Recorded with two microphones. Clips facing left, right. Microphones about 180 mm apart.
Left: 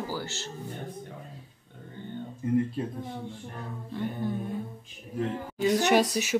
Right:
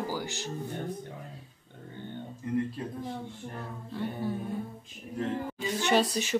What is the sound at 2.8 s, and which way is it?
Speech, 25° left (ahead or behind).